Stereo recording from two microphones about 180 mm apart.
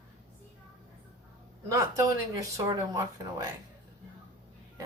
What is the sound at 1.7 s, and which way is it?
Speech, 20° right (ahead or behind).